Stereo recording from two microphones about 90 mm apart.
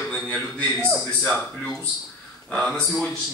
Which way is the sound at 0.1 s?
15° left (ahead or behind).